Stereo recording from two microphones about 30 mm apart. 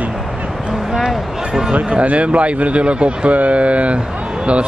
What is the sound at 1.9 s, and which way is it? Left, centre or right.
Speech, right.